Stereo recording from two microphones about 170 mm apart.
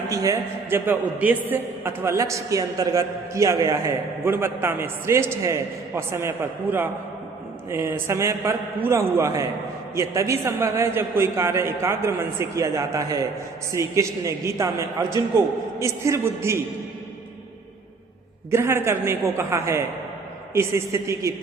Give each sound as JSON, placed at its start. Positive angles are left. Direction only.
{"t": 0.1, "sound": "a man's voice", "side_deg": -20}
{"t": 18.5, "sound": "a man's voice", "side_deg": -15}